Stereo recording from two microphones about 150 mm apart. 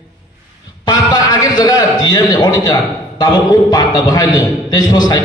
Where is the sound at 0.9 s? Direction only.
25° left (ahead or behind).